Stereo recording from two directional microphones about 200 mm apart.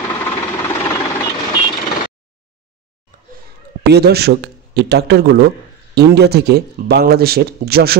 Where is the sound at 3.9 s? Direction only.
55° right (ahead or behind).